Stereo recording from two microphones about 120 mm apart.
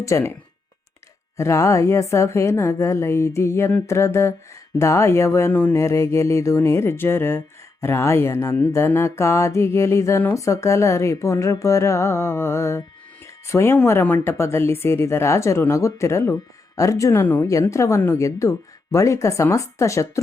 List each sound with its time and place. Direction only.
0.0 s speech: 25° left (ahead or behind)
1.4 s speech: 25° left (ahead or behind)